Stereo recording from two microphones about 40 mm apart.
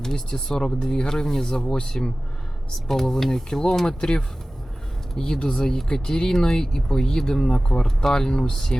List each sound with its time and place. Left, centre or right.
0.0 s speech: centre